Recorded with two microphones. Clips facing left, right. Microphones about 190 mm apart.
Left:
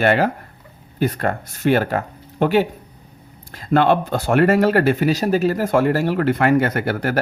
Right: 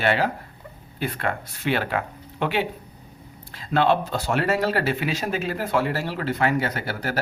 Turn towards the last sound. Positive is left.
turn(degrees=55)  # may be behind; listen again after turning